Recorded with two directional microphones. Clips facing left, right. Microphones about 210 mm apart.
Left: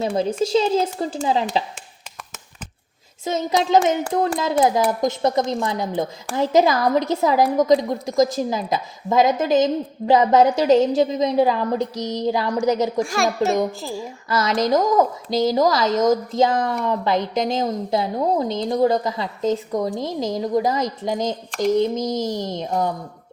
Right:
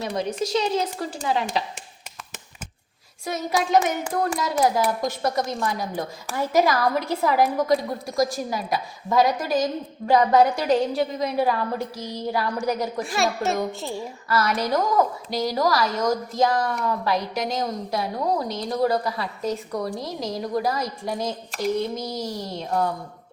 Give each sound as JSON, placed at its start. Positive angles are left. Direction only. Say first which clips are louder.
{"t": 0.0, "sound": "a woman's voice", "louder": "left 5 dB", "side_deg": 25}
{"t": 3.2, "sound": "a woman's voice", "louder": "left 4 dB", "side_deg": 25}
{"t": 13.0, "sound": "a child's voice", "louder": "left 4 dB", "side_deg": 0}
{"t": 14.3, "sound": "a woman's voice", "louder": "left 4 dB", "side_deg": 20}